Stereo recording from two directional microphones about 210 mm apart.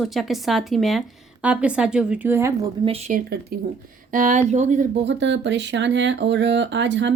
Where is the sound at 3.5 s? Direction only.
45° right (ahead or behind).